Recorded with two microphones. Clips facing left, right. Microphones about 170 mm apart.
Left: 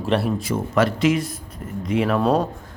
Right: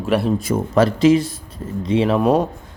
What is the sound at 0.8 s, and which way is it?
Speech, 35° right (ahead or behind).